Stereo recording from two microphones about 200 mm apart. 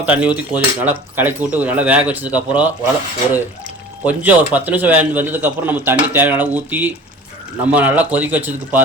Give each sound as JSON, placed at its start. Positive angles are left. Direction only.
{"t": 0.0, "sound": "a man's voice", "side_deg": -5}
{"t": 4.0, "sound": "a man's voice", "side_deg": -10}